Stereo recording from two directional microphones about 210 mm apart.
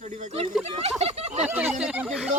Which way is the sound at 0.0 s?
30° right (ahead or behind).